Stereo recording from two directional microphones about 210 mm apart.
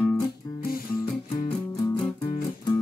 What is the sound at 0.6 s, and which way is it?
Music, 45° left (ahead or behind).